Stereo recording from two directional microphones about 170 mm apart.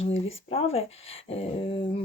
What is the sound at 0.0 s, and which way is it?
Speech, 35° left (ahead or behind).